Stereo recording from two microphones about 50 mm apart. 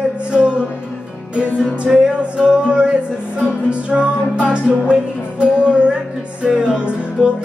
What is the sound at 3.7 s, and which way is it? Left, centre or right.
Music, right.